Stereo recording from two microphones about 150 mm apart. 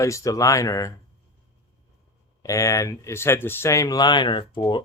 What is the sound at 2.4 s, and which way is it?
Speech, 20° left (ahead or behind).